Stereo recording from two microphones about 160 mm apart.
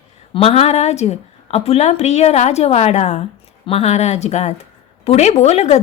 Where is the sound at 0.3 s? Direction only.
40° left (ahead or behind).